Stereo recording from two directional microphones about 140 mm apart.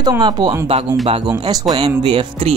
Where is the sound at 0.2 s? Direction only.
30° right (ahead or behind).